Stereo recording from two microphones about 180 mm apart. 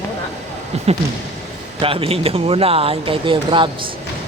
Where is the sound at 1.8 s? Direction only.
30° right (ahead or behind).